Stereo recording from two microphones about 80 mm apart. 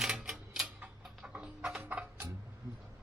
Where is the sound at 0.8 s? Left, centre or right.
Centre.